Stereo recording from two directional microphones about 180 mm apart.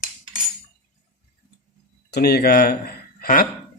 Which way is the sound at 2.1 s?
60° left (ahead or behind).